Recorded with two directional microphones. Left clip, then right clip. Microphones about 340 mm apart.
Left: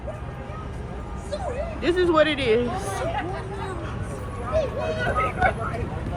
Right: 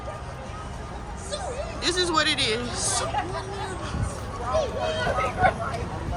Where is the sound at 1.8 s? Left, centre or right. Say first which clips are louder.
Left 4 dB; centre.